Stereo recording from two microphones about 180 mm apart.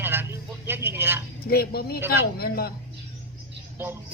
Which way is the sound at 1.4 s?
60° left (ahead or behind).